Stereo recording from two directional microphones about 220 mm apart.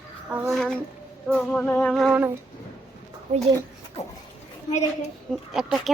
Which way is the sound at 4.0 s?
30° left (ahead or behind).